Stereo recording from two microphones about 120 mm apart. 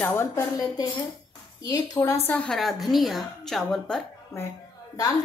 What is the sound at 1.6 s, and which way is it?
Speech, 30° left (ahead or behind).